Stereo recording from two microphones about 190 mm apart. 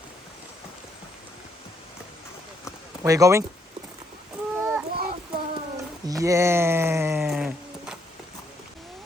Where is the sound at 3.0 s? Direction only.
15° right (ahead or behind).